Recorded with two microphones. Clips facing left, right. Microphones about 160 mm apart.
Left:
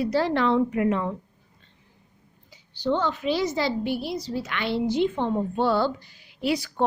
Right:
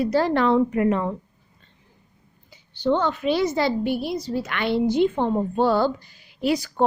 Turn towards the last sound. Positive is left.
turn(degrees=-45)  # may be behind; listen again after turning